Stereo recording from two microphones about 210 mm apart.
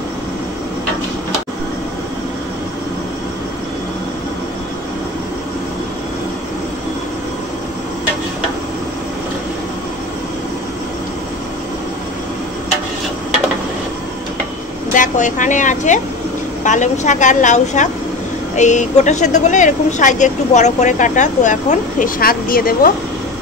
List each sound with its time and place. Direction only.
15.0 s speech: 35° left (ahead or behind)